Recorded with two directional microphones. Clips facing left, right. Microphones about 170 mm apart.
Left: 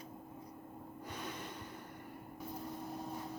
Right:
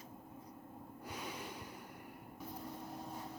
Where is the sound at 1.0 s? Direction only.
10° right (ahead or behind).